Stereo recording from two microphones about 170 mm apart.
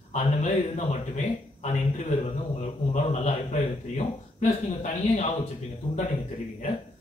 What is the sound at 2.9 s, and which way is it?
A man's voice, 45° left (ahead or behind).